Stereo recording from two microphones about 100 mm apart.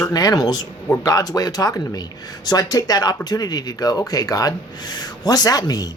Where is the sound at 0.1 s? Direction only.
40° left (ahead or behind).